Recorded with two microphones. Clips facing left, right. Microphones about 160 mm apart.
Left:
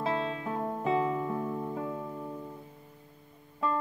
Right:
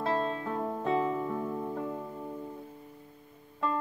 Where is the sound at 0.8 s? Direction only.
Centre (ahead or behind).